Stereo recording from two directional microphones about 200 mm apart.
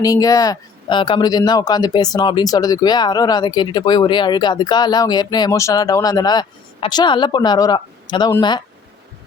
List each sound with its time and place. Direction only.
0.0 s speech: 15° left (ahead or behind)